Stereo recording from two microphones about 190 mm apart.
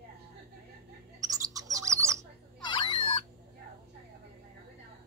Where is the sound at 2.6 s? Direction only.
25° left (ahead or behind).